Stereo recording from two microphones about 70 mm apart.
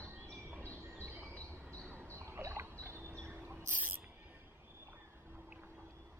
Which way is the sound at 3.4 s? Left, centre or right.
Right.